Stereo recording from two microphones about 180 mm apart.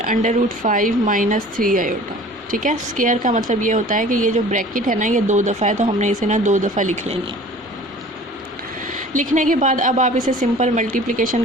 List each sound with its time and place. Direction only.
0.0 s a woman's voice: 45° right (ahead or behind)
8.9 s a woman's voice: 45° right (ahead or behind)